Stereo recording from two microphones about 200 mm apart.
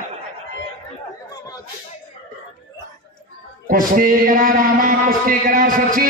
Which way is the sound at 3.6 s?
45° right (ahead or behind).